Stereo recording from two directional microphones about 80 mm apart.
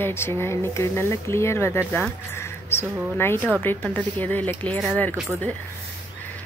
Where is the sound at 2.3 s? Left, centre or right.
Left.